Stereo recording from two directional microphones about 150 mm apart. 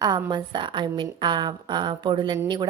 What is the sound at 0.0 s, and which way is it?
A woman's voice, 30° right (ahead or behind).